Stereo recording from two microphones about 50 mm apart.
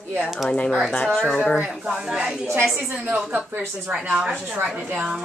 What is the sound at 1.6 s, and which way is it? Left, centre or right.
A woman's voice, right.